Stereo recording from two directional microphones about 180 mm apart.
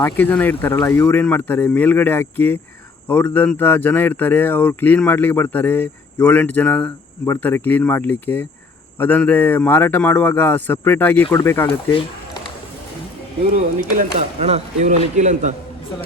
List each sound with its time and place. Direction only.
0.0 s speech: 10° left (ahead or behind)
13.9 s a man's voice: 40° right (ahead or behind)